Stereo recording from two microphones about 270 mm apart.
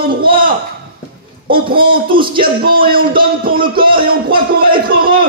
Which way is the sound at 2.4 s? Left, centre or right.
Right.